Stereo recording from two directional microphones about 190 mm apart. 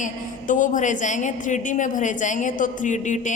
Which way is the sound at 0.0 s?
45° left (ahead or behind).